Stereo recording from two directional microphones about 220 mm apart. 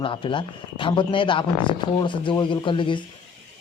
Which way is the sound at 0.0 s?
25° left (ahead or behind).